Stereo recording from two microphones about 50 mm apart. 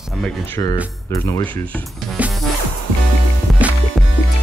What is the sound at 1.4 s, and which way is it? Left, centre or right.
Speech, left.